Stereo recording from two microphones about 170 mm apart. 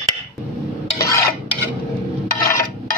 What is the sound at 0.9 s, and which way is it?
Stir, 20° left (ahead or behind).